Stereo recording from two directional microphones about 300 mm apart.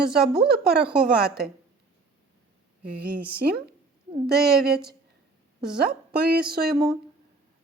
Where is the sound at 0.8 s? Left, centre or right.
Centre.